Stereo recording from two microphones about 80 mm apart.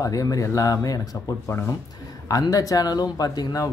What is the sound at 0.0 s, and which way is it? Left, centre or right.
Speech, left.